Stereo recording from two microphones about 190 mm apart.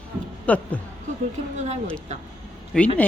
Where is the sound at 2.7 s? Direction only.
5° left (ahead or behind).